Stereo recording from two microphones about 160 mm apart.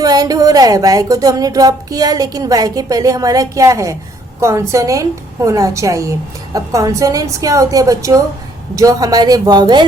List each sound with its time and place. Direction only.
0.0 s speech: 25° right (ahead or behind)